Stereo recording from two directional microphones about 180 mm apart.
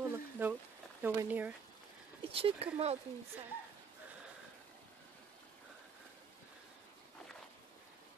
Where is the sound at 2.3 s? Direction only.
30° right (ahead or behind).